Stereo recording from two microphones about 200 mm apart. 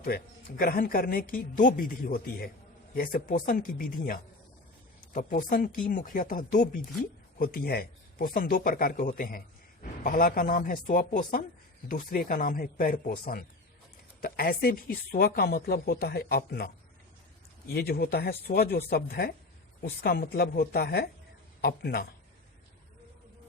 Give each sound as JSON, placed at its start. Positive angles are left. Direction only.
{"t": 0.1, "sound": "speech", "side_deg": 45}
{"t": 17.7, "sound": "speech", "side_deg": 50}